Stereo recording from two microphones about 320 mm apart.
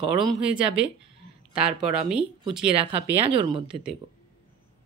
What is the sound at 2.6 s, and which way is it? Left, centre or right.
Speech, centre.